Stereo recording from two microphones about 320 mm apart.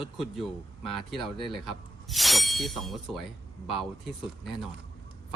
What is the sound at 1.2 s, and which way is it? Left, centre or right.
Speech, centre.